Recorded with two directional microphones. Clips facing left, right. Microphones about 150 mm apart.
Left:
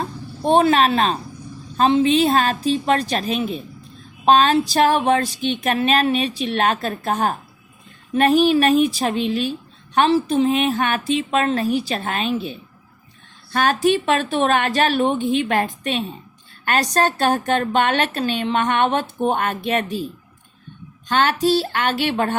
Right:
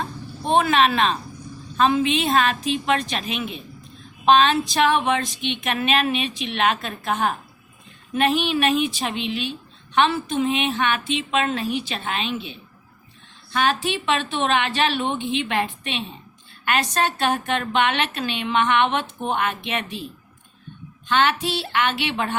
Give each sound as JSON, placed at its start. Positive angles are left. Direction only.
{"t": 0.4, "sound": "a woman's voice", "side_deg": 35}
{"t": 21.1, "sound": "speech", "side_deg": 40}